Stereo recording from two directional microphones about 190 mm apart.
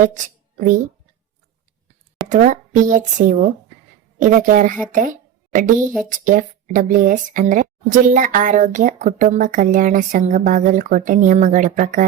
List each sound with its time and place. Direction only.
0.0 s a woman's voice: 40° right (ahead or behind)
2.3 s a woman's voice: 40° right (ahead or behind)